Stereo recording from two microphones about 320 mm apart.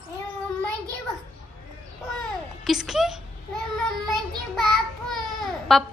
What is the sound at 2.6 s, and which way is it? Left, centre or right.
Speech, centre.